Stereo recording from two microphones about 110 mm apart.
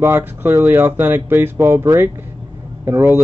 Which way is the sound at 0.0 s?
20° right (ahead or behind).